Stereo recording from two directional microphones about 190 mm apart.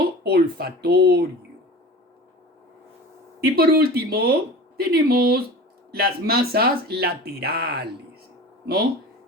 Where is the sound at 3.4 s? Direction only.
55° right (ahead or behind).